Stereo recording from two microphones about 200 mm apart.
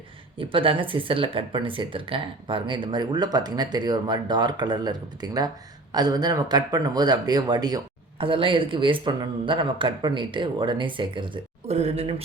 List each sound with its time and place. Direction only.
0.3 s speech: 25° right (ahead or behind)